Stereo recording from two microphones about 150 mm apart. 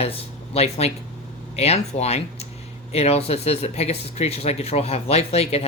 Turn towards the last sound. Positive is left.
turn(degrees=45)  # may be behind; listen again after turning